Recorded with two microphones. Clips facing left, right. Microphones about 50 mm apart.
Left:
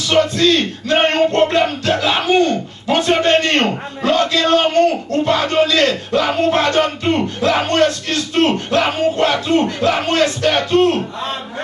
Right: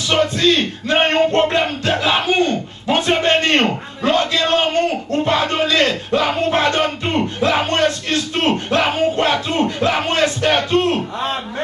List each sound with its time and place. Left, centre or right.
0.1 s speech: right